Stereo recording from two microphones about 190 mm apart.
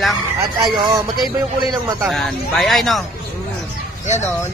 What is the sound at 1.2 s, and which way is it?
Speech, centre (ahead or behind).